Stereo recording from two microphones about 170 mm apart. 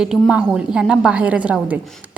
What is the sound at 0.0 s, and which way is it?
A woman's voice, 5° right (ahead or behind).